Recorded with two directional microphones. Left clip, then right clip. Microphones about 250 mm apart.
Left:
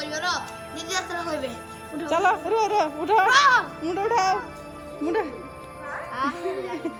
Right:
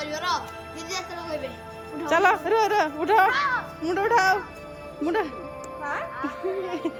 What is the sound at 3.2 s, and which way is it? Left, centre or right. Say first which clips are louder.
Speech: left 6 dB; left.